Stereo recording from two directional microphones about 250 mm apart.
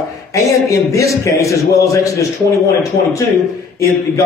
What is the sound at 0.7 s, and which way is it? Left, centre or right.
A man's voice, centre.